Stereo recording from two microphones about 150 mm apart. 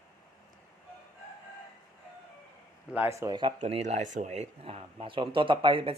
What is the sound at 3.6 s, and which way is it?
Speech, 50° right (ahead or behind).